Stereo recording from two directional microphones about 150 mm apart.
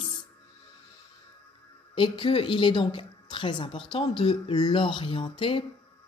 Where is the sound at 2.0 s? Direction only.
35° left (ahead or behind).